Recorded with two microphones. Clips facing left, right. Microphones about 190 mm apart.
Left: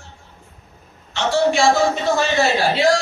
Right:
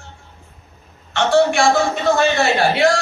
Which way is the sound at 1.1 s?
60° right (ahead or behind).